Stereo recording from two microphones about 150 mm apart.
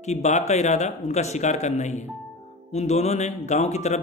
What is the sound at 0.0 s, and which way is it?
A man's voice, 50° left (ahead or behind).